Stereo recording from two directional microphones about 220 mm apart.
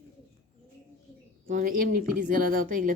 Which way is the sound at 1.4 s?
40° right (ahead or behind).